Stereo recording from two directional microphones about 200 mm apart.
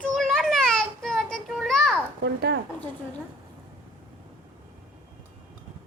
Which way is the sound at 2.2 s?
55° right (ahead or behind).